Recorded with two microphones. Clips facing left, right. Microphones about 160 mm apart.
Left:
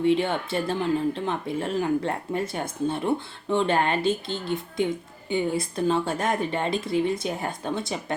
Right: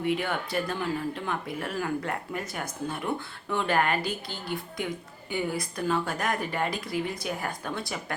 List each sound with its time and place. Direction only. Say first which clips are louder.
0.0 s speech: left 6 dB; 25° left (ahead or behind)